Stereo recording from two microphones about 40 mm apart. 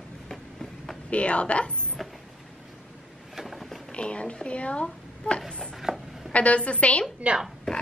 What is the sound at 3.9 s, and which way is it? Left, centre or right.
Speech, left.